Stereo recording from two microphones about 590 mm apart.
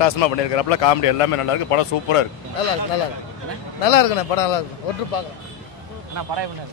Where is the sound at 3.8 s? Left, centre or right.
Left.